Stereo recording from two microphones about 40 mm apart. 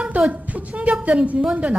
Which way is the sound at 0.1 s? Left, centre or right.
Right.